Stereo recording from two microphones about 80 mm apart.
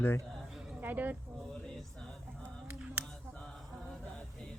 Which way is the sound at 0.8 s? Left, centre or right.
Right.